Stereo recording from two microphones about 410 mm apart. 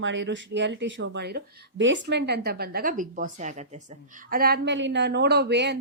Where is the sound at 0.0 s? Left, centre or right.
Right.